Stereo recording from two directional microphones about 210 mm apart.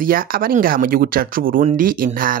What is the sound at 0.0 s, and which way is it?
Speech, 45° right (ahead or behind).